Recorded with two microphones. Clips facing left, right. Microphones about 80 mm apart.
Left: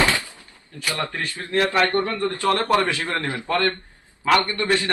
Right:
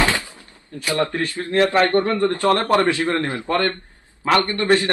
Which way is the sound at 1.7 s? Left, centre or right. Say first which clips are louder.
Right 4 dB; right.